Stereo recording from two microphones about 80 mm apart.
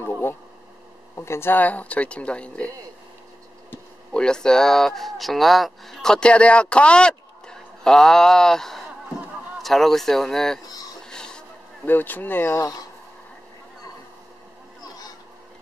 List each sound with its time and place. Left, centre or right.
0.0 s a sound: left
1.1 s speech: left; by 2.7 s centre
4.1 s speech: centre
11.1 s a sound: centre
11.8 s speech: left
12.5 s speech: left